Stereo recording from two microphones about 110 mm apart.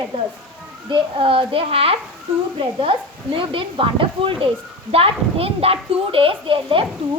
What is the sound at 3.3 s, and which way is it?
A woman's voice, 50° right (ahead or behind).